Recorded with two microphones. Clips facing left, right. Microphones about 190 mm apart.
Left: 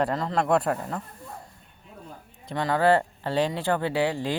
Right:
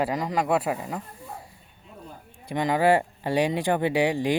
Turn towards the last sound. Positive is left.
turn(degrees=-15)  # may be behind; listen again after turning